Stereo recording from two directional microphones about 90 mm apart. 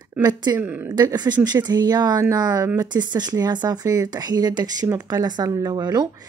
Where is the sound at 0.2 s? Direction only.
45° right (ahead or behind).